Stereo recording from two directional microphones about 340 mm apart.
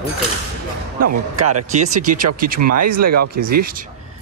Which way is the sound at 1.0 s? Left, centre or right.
Right.